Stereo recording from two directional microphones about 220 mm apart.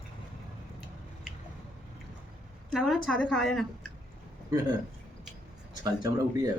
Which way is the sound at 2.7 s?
Centre (ahead or behind).